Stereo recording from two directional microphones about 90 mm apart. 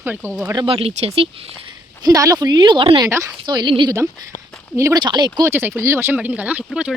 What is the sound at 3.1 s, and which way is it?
Speech, 35° right (ahead or behind).